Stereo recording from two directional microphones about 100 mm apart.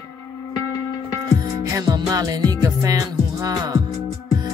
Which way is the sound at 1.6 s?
40° right (ahead or behind).